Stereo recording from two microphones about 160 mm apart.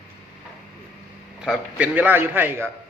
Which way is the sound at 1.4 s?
5° right (ahead or behind).